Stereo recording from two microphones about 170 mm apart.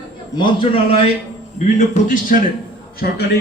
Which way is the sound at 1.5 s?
45° left (ahead or behind).